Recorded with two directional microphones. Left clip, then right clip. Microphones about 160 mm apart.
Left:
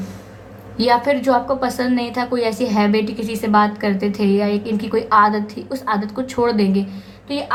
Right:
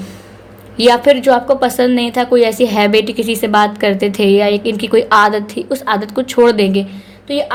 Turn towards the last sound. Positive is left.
turn(degrees=-30)  # may be behind; listen again after turning